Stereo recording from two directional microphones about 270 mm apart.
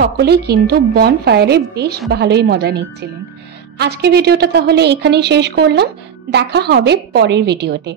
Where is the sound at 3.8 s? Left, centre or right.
Right.